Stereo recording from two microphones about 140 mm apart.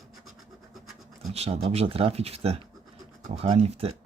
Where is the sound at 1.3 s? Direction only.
50° right (ahead or behind).